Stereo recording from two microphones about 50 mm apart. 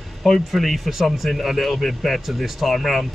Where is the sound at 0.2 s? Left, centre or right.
Centre.